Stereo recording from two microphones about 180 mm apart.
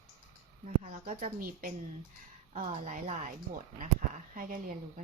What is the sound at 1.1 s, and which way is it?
Speech, 50° right (ahead or behind).